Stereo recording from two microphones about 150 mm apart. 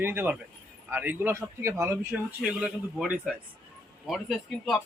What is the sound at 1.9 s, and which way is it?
A man's voice, 10° right (ahead or behind).